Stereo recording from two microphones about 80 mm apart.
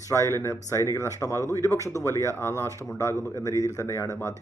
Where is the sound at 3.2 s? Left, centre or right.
Right.